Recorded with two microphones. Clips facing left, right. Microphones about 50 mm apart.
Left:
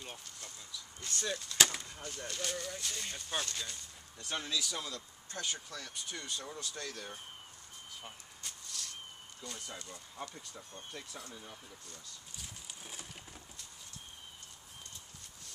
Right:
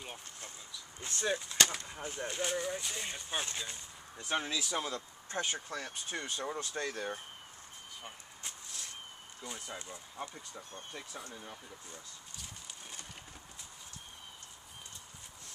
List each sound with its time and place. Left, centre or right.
1.0 s speech: right
1.6 s speech: centre
1.9 s speech: right
8.4 s a sound: right
9.4 s speech: centre